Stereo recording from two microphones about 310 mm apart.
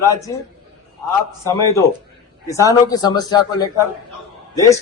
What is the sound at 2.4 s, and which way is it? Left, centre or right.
A man's voice, centre.